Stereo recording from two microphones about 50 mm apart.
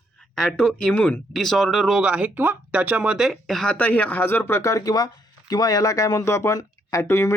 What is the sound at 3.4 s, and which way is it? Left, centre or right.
Speech, centre.